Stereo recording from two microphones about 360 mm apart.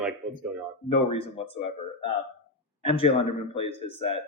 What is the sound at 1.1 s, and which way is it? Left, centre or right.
Speech, centre.